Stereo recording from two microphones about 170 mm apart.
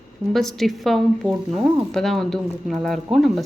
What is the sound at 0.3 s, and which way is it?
Speech, centre (ahead or behind).